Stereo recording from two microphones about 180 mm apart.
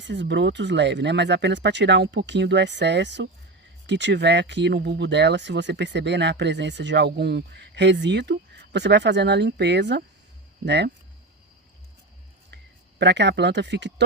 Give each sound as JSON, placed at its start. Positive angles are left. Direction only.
{"t": 0.0, "sound": "speech", "side_deg": -80}
{"t": 13.0, "sound": "speech", "side_deg": -75}